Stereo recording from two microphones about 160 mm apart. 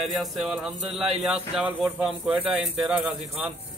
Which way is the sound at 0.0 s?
Centre (ahead or behind).